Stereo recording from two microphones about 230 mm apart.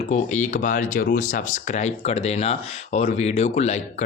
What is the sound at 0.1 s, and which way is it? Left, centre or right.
Speech, left.